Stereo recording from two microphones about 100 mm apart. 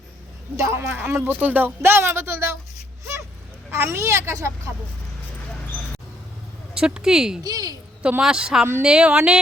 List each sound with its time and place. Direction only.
0.5 s speech: 25° right (ahead or behind)
1.2 s speech: 15° right (ahead or behind)
3.7 s speech: 25° right (ahead or behind)
6.7 s speech: 5° right (ahead or behind)
7.4 s speech: 40° right (ahead or behind)
8.2 s speech: 10° right (ahead or behind)